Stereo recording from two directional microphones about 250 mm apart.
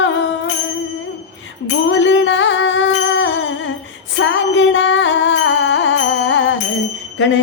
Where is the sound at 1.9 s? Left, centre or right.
Left.